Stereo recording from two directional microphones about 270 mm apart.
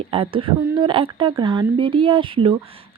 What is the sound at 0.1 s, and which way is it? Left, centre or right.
Speech, centre.